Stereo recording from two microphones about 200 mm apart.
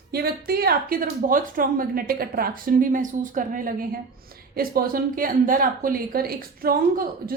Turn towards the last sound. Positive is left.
turn(degrees=-50)  # may be behind; listen again after turning